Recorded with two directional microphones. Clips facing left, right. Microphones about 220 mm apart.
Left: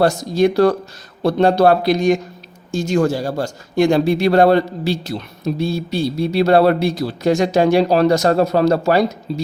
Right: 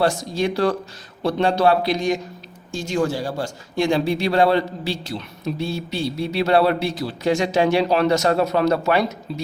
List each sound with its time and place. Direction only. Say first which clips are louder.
0.0 s speech: left 6 dB; 40° left (ahead or behind)